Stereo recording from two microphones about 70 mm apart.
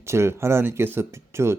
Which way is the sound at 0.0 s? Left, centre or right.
Right.